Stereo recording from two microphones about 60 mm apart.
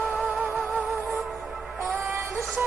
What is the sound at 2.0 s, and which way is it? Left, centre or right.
Synthetic singing, right.